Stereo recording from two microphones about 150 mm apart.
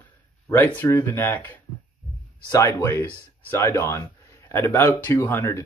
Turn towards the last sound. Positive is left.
turn(degrees=20)  # may be behind; listen again after turning